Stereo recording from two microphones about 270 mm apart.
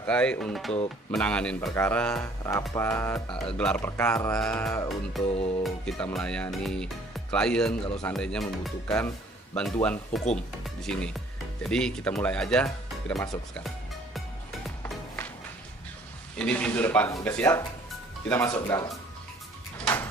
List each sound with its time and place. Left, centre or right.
0.0 s speech: centre
2.7 s music: centre
5.4 s music: left
5.6 s speech: centre
14.8 s music: centre
16.4 s music: centre
19.8 s a sound: centre